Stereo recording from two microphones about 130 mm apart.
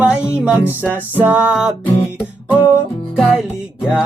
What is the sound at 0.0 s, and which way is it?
Music, 10° right (ahead or behind).